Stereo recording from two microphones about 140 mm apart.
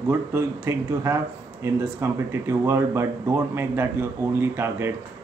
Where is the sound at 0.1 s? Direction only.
20° right (ahead or behind).